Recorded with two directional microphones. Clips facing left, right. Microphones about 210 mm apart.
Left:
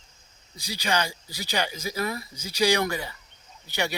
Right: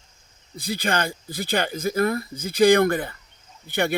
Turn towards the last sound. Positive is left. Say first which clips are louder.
# right 6 dB
turn(degrees=-55)  # may be behind; listen again after turning